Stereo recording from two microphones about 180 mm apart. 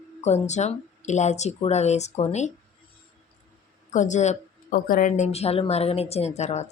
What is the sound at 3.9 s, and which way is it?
Speech, 45° left (ahead or behind).